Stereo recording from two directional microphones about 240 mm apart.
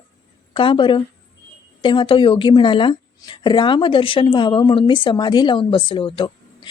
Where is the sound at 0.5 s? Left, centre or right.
Left.